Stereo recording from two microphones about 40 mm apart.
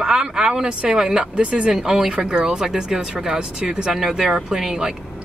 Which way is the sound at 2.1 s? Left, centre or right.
Right.